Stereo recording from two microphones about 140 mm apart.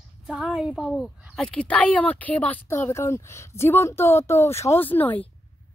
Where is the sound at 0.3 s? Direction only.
5° right (ahead or behind); by 5.2 s 15° left (ahead or behind).